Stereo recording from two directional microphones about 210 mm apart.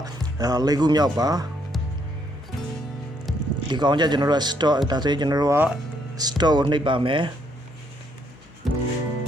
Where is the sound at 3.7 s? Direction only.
20° right (ahead or behind).